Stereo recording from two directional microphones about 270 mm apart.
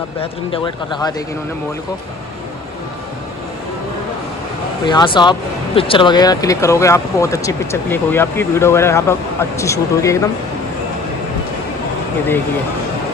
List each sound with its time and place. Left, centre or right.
0.2 s speech: centre
4.8 s speech: centre